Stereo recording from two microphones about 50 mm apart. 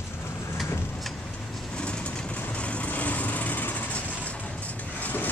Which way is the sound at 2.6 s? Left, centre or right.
Left.